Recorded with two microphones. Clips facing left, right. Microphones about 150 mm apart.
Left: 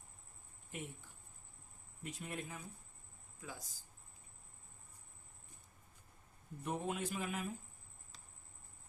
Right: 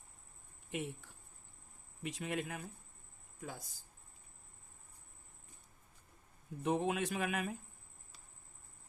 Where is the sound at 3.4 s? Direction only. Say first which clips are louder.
Right 4 dB; 60° right (ahead or behind).